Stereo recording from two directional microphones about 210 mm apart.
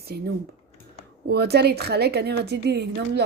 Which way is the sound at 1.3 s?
50° right (ahead or behind).